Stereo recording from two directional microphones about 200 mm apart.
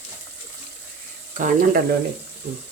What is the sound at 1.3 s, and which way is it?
Speech, 40° right (ahead or behind).